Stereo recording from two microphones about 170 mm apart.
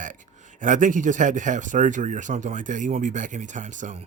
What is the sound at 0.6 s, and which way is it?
Speech, 50° right (ahead or behind).